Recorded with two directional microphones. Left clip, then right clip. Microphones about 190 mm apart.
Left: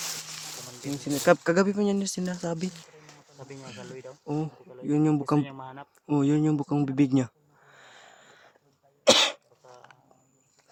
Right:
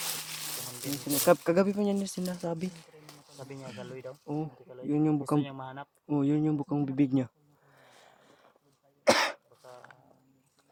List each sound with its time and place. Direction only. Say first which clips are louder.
1.2 s speech: left 3 dB; 30° left (ahead or behind)
3.3 s speech: even; 10° right (ahead or behind)
4.3 s speech: left 5 dB; 35° left (ahead or behind)
5.4 s speech: left 2 dB; 10° right (ahead or behind)
6.1 s speech: left 4 dB; 30° left (ahead or behind)
7.8 s vehicle: left 6 dB; 30° left (ahead or behind)
9.0 s cough: left 5 dB; 25° left (ahead or behind)